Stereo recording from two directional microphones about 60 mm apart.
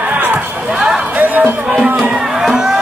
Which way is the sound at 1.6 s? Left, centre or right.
Centre.